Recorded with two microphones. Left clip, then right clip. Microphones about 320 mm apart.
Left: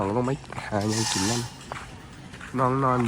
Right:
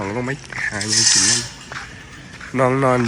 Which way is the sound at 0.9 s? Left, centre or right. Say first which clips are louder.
Right 14 dB; left.